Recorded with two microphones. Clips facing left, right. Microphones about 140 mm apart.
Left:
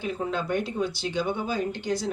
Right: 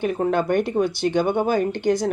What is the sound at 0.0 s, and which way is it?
Speech, 60° right (ahead or behind).